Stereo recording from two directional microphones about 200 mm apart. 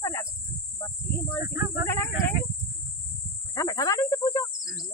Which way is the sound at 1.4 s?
10° right (ahead or behind).